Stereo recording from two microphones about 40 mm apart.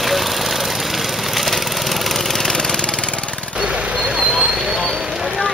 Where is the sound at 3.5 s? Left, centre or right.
Right.